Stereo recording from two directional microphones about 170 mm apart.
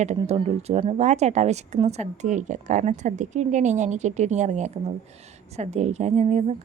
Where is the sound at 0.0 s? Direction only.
45° right (ahead or behind).